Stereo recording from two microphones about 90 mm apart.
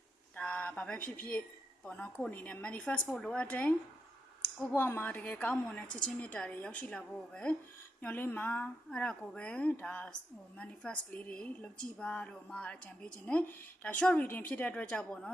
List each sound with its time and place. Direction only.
0.3 s a woman's voice: 15° left (ahead or behind)